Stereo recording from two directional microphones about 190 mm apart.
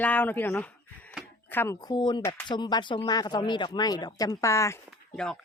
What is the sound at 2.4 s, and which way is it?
Speech, 25° left (ahead or behind).